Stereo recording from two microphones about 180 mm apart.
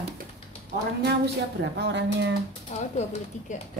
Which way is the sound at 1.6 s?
75° right (ahead or behind).